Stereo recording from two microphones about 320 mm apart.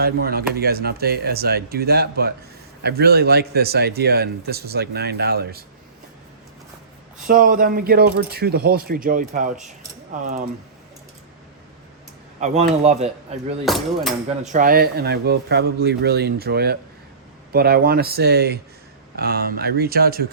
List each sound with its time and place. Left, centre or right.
0.0 s a man's voice: right
7.2 s a man's voice: right
12.4 s a man's voice: centre
13.7 s speech: centre
14.4 s a man's voice: right